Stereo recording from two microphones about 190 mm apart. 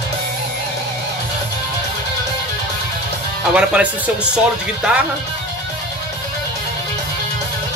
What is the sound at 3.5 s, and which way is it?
Speech, 5° right (ahead or behind).